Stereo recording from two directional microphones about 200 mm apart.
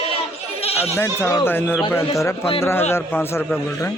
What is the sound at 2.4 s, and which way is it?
Speech, 30° left (ahead or behind).